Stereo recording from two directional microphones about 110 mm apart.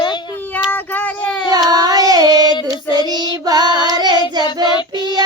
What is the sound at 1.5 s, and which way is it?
Child singing, 35° right (ahead or behind).